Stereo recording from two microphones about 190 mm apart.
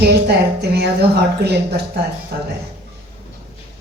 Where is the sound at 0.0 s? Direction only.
60° right (ahead or behind).